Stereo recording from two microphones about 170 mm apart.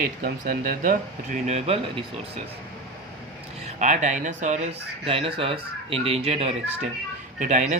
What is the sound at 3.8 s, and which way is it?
Speech, 45° right (ahead or behind).